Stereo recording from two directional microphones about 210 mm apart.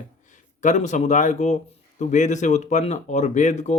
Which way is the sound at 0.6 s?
35° left (ahead or behind).